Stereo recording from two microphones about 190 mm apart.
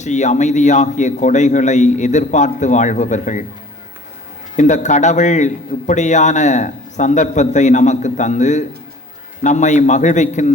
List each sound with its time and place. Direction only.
0.0 s a man's voice: 40° left (ahead or behind)
4.5 s a man's voice: 40° left (ahead or behind)